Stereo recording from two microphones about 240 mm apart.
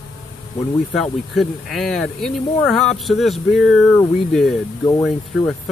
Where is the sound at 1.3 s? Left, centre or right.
Centre.